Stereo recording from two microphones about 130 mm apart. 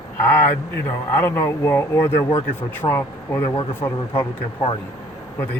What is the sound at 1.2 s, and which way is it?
Speech, 20° left (ahead or behind).